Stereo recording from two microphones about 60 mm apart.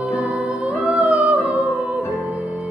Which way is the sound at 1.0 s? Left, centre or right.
Right.